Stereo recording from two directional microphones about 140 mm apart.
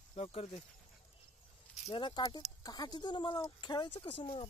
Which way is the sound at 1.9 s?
35° left (ahead or behind).